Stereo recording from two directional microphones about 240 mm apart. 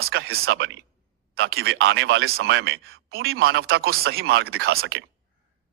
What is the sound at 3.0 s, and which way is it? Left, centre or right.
Speech, right.